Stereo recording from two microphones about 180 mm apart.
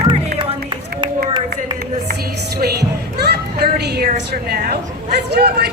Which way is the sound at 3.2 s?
65° right (ahead or behind).